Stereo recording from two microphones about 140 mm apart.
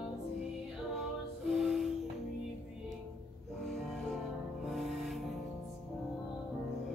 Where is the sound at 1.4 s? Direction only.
Centre (ahead or behind).